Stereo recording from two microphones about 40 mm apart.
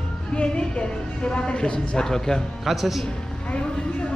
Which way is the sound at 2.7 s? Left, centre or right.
Centre.